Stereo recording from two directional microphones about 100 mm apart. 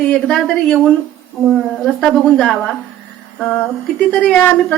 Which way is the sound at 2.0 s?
5° left (ahead or behind).